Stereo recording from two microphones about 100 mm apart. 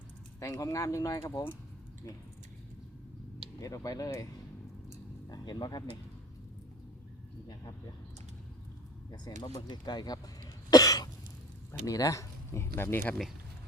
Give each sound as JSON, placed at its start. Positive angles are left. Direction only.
{"t": 0.3, "sound": "speech", "side_deg": 30}
{"t": 3.6, "sound": "speech", "side_deg": 35}
{"t": 5.3, "sound": "speech", "side_deg": 40}
{"t": 9.1, "sound": "speech", "side_deg": 45}
{"t": 10.7, "sound": "cough", "side_deg": 40}
{"t": 11.9, "sound": "speech", "side_deg": 35}